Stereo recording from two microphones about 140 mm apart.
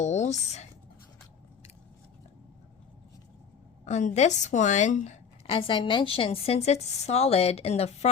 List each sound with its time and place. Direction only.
0.0 s speech: 55° left (ahead or behind)
3.8 s a woman's voice: 55° left (ahead or behind)
5.5 s a woman's voice: 40° left (ahead or behind)